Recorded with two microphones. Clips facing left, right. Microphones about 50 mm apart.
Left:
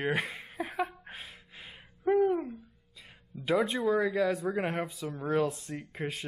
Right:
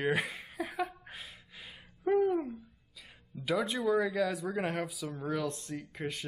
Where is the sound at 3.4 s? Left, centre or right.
Centre.